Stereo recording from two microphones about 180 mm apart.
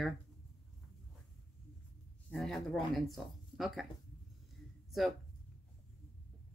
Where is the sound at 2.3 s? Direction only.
Centre (ahead or behind).